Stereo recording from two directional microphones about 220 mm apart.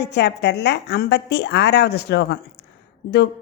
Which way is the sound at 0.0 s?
50° left (ahead or behind).